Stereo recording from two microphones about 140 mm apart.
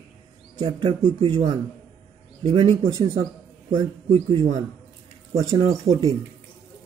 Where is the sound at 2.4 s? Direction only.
35° right (ahead or behind).